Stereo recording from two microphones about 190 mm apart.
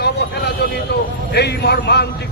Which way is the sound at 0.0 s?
60° left (ahead or behind).